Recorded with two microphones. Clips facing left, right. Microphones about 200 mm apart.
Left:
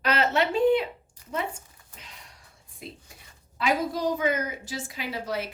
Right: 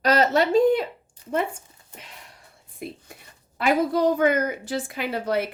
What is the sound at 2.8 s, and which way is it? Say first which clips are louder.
A woman's voice: right 7 dB; 55° right (ahead or behind).